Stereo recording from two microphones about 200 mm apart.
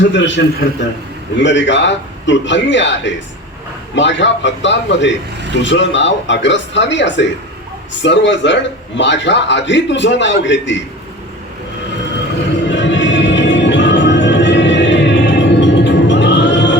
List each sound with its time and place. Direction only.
0.1 s a man's voice: 65° left (ahead or behind)
12.6 s music: 65° left (ahead or behind)